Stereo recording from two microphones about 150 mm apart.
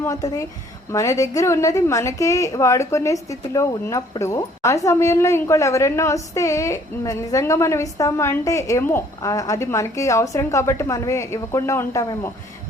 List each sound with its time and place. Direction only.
0.0 s a woman's voice: 25° left (ahead or behind)